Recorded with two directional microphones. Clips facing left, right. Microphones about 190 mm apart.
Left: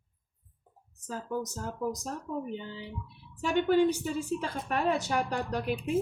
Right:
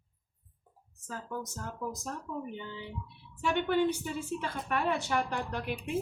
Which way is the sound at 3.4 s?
40° left (ahead or behind).